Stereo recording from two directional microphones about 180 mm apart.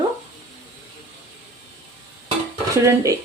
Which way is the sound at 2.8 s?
15° right (ahead or behind).